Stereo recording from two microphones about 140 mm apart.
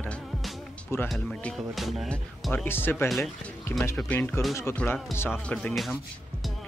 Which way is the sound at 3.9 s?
10° left (ahead or behind).